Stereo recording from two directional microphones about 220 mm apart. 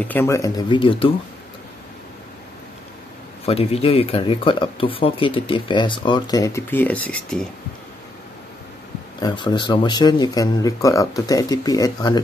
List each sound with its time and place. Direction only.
0.0 s speech: 10° left (ahead or behind)
3.4 s speech: 25° left (ahead or behind); by 7.4 s 5° left (ahead or behind)
9.2 s speech: 20° left (ahead or behind)